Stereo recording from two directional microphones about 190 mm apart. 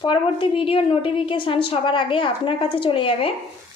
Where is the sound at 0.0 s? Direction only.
25° left (ahead or behind).